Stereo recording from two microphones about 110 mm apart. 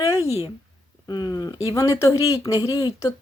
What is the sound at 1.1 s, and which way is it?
Speech, 40° left (ahead or behind).